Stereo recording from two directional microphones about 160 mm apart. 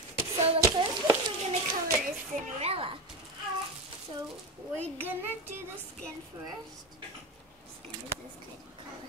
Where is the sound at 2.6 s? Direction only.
35° right (ahead or behind).